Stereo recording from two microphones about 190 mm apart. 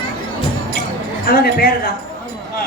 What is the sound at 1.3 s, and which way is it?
Speech, 55° left (ahead or behind).